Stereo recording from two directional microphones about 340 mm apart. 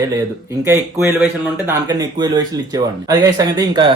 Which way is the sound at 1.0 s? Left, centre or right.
Centre.